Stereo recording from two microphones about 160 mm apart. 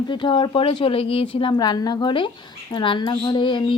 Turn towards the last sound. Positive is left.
turn(degrees=30)  # may be behind; listen again after turning